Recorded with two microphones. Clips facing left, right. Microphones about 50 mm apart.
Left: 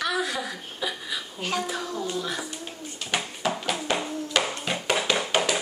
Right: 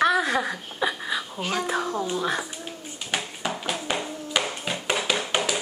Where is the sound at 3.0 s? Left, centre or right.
Centre.